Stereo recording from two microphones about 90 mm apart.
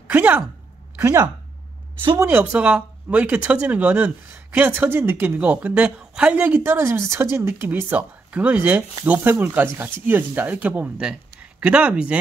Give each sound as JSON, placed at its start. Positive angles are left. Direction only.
{"t": 0.1, "sound": "speech", "side_deg": -20}
{"t": 2.1, "sound": "speech", "side_deg": -25}